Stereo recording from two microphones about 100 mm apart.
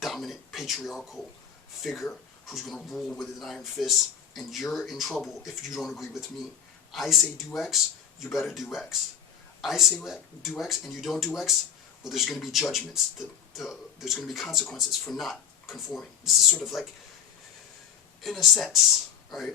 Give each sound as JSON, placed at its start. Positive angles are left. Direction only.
{"t": 0.0, "sound": "speech", "side_deg": 0}
{"t": 18.2, "sound": "speech", "side_deg": 0}